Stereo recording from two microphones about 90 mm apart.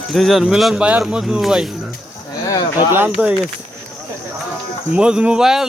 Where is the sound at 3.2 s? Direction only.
20° right (ahead or behind).